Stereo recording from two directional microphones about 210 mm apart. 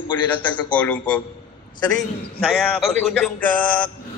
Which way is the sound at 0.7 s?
5° left (ahead or behind).